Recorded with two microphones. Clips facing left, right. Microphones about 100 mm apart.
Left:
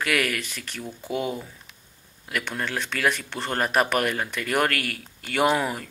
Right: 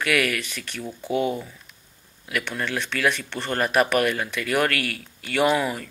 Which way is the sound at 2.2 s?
30° left (ahead or behind).